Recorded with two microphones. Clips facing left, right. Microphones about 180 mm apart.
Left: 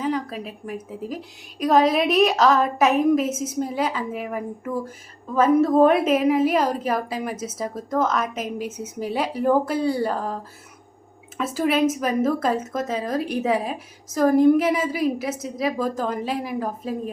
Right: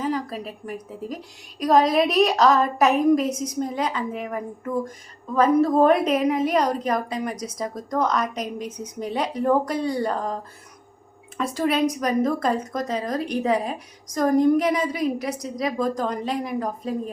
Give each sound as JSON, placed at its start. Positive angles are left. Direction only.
{"t": 0.0, "sound": "a woman's voice", "side_deg": 0}
{"t": 11.3, "sound": "a woman's voice", "side_deg": 5}